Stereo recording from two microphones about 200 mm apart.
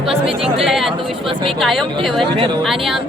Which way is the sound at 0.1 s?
30° right (ahead or behind).